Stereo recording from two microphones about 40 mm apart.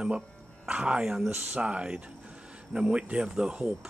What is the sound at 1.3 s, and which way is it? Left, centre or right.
Speech, right.